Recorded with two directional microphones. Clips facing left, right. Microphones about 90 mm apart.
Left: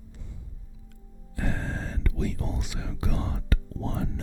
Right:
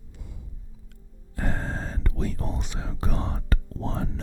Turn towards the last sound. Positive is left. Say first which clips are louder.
# right 1 dB
turn(degrees=-50)  # may be behind; listen again after turning